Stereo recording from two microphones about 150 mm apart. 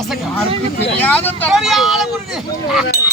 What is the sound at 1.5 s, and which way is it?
Speech, centre (ahead or behind).